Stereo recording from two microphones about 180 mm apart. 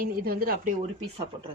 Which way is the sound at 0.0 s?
55° right (ahead or behind).